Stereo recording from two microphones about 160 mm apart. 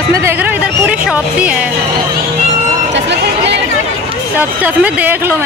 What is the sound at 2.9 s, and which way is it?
Run, 90° right.